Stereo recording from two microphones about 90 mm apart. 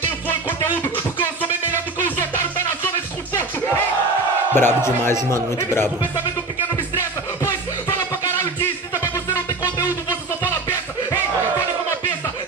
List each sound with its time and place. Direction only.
4.6 s speech: 25° left (ahead or behind)
9.0 s music: 35° left (ahead or behind)